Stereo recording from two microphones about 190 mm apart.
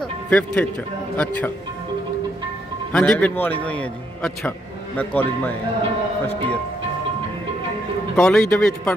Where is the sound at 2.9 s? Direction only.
5° left (ahead or behind).